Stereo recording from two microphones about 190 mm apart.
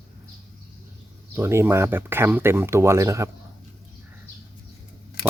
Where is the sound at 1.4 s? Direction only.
10° right (ahead or behind).